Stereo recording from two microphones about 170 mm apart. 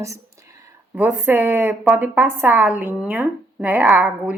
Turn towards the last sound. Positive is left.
turn(degrees=-10)  # may be behind; listen again after turning